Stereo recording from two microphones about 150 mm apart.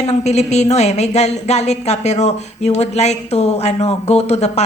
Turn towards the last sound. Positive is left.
turn(degrees=45)  # may be behind; listen again after turning